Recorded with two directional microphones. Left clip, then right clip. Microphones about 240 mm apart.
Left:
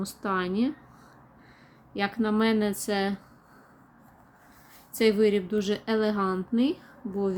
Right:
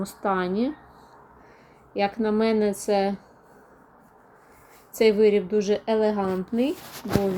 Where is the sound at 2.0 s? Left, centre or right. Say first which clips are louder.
Right 4 dB; centre.